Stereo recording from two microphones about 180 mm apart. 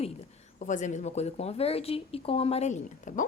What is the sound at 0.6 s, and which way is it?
A woman's voice, 45° left (ahead or behind).